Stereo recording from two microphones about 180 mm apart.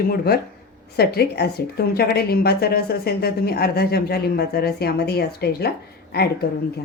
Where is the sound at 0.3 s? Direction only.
60° left (ahead or behind).